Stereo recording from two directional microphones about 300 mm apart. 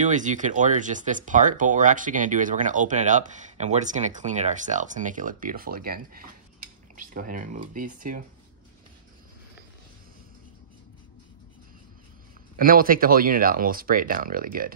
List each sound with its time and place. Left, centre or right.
0.0 s speech: right
12.5 s speech: right